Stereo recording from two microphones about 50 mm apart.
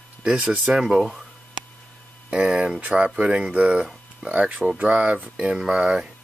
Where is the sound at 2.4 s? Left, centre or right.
Centre.